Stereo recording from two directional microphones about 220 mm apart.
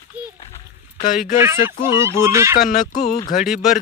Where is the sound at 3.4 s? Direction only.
Centre (ahead or behind).